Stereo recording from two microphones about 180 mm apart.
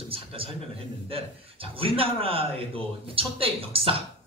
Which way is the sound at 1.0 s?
30° right (ahead or behind).